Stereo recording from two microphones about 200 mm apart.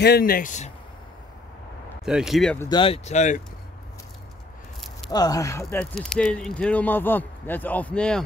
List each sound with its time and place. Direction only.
0.0 s speech: 50° left (ahead or behind)
2.0 s speech: 5° right (ahead or behind)
2.7 s speech: 25° left (ahead or behind)
5.0 s speech: 20° left (ahead or behind)
5.9 s speech: centre (ahead or behind)